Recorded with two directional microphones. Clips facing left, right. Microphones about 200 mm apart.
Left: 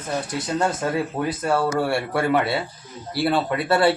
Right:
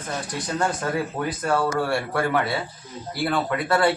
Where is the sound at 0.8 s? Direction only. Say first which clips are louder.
Left 2 dB; 25° left (ahead or behind).